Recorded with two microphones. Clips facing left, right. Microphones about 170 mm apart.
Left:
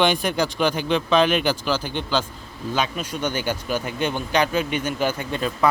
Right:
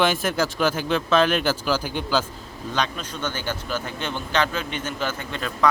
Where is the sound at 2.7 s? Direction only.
10° left (ahead or behind).